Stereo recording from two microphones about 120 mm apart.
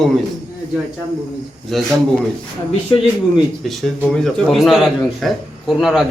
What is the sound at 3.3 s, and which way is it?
A man's voice, 10° right (ahead or behind).